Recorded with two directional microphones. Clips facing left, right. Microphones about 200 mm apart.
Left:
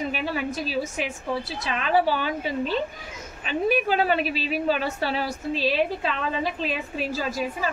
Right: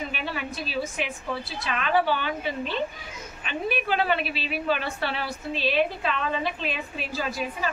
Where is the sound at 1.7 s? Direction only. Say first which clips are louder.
Left 2 dB; 35° left (ahead or behind).